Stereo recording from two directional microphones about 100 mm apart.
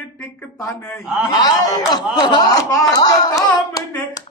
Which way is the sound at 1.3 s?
40° left (ahead or behind).